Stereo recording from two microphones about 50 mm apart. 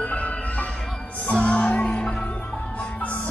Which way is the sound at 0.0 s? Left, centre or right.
Left.